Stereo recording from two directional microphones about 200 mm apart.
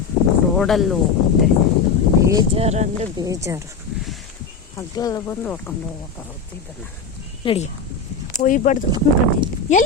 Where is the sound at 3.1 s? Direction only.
15° right (ahead or behind).